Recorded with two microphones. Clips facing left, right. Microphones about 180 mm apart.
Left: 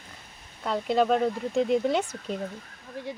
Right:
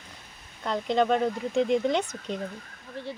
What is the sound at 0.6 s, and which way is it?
Speech, 5° left (ahead or behind).